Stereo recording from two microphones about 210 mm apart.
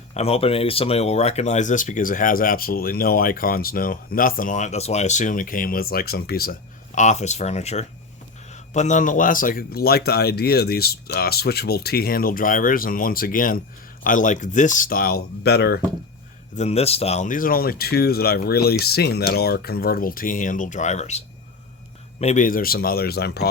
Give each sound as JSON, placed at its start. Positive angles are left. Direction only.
{"t": 0.1, "sound": "speech", "side_deg": 30}
{"t": 16.6, "sound": "speech", "side_deg": 30}